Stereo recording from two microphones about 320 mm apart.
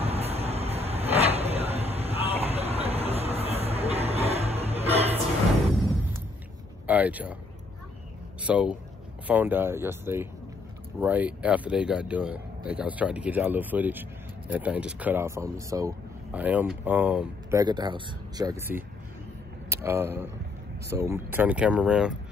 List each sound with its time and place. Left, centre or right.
0.0 s vehicle: centre
6.9 s speech: centre
8.4 s speech: centre